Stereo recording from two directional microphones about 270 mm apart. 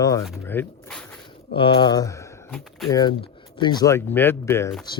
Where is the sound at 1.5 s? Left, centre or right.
Centre.